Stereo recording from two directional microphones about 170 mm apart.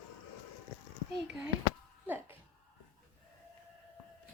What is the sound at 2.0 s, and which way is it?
Music, 10° right (ahead or behind).